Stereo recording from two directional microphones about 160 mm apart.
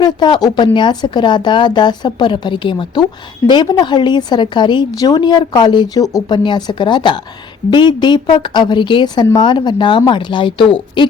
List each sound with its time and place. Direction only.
0.0 s a woman's voice: 25° left (ahead or behind)